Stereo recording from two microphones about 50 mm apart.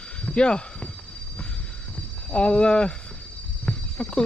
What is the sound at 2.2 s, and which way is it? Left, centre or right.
Speech, left.